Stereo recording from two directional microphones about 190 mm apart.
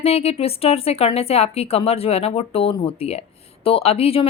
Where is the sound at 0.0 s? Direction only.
35° left (ahead or behind).